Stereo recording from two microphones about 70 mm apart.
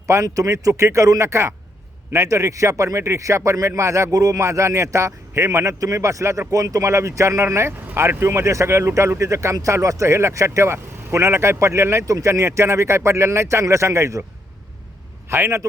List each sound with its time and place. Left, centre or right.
0.1 s speech: right
15.3 s a man's voice: right